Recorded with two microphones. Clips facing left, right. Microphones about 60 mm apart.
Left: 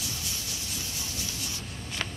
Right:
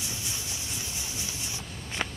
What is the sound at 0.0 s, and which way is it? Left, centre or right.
Vehicle, right.